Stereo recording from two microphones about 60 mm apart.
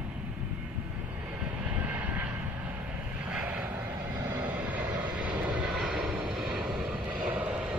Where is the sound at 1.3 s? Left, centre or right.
Right.